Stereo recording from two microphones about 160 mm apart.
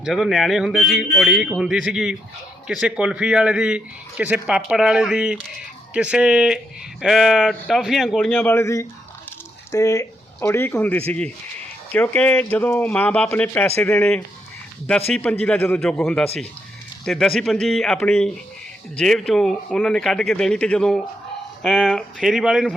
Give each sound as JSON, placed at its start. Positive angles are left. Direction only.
{"t": 0.0, "sound": "speech", "side_deg": 0}
{"t": 8.3, "sound": "speech", "side_deg": 10}